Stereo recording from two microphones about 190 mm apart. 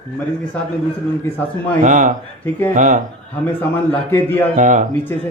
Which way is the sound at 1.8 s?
40° right (ahead or behind).